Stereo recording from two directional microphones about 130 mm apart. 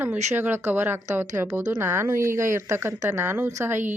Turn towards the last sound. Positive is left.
turn(degrees=-20)  # may be behind; listen again after turning